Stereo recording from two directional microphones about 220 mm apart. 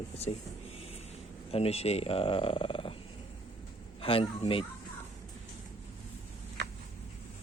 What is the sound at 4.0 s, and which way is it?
Speech, 25° left (ahead or behind).